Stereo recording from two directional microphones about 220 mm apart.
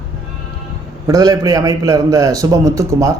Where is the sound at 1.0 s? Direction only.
15° right (ahead or behind).